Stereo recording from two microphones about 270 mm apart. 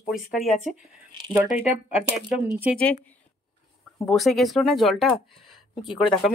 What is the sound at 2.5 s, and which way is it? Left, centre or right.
Speech, centre.